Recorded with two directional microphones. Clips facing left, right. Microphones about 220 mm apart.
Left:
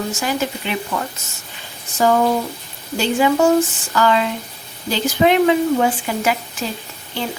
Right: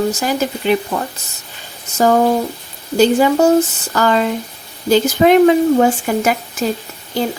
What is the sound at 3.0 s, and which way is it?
Speech, 40° right (ahead or behind).